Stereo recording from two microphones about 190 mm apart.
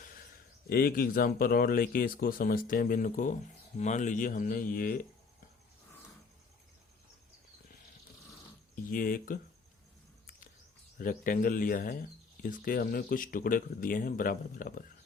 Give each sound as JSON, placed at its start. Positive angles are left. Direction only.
{"t": 0.0, "sound": "a sound", "side_deg": 50}
{"t": 0.7, "sound": "speech", "side_deg": 50}
{"t": 8.7, "sound": "speech", "side_deg": 50}
{"t": 10.9, "sound": "speech", "side_deg": 45}